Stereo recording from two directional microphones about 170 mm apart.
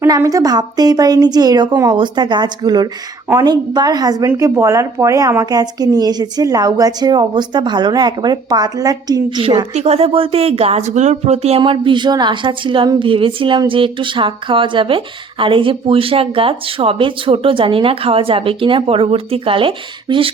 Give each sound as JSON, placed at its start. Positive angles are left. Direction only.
{"t": 0.0, "sound": "a woman's voice", "side_deg": -20}